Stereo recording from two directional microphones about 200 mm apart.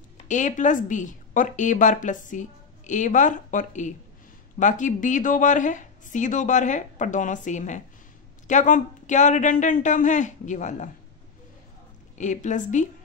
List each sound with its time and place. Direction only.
0.3 s speech: 40° left (ahead or behind)
12.2 s speech: 40° left (ahead or behind)